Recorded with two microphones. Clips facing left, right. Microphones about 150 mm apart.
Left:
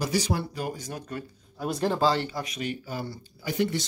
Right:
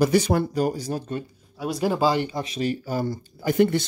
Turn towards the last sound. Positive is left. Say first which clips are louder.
# right 7 dB
turn(degrees=-55)  # may be behind; listen again after turning